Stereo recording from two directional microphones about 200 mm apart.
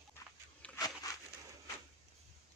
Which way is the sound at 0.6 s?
5° left (ahead or behind).